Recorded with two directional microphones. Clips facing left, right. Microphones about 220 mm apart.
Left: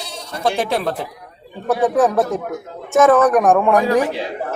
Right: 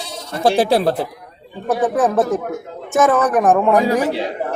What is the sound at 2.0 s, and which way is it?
A man's voice, centre (ahead or behind).